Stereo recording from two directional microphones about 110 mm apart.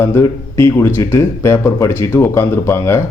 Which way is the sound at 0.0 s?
25° left (ahead or behind).